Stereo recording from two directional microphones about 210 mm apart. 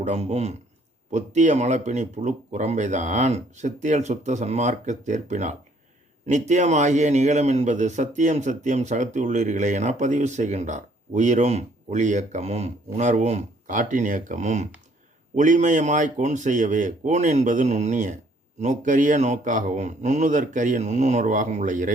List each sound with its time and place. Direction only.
0.0 s a man's voice: 30° right (ahead or behind)